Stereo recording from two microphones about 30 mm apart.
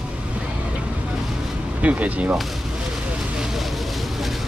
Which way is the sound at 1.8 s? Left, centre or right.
Right.